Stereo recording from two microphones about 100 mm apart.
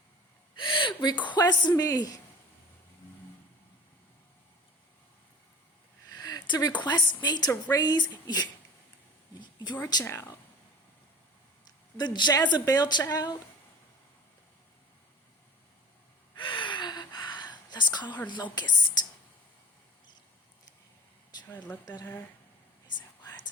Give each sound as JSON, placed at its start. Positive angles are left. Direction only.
{"t": 0.5, "sound": "speech", "side_deg": 55}
{"t": 6.1, "sound": "a woman's voice", "side_deg": 40}
{"t": 9.4, "sound": "a sound", "side_deg": 50}
{"t": 10.0, "sound": "speech", "side_deg": 30}
{"t": 11.9, "sound": "a woman's voice", "side_deg": 50}
{"t": 16.4, "sound": "a sound", "side_deg": 55}
{"t": 18.3, "sound": "a woman's voice", "side_deg": 50}
{"t": 21.4, "sound": "speech", "side_deg": 15}